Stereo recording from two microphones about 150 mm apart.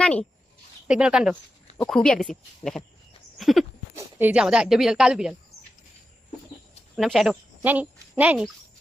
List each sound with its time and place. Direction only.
0.0 s speech: 5° left (ahead or behind)
0.9 s speech: 5° right (ahead or behind)
1.8 s speech: 5° left (ahead or behind)
3.9 s speech: 10° right (ahead or behind)
6.9 s speech: centre (ahead or behind)